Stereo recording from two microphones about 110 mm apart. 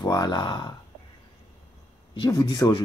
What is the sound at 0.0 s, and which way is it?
Speech, 40° left (ahead or behind).